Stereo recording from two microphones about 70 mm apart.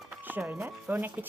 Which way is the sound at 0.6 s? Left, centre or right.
Right.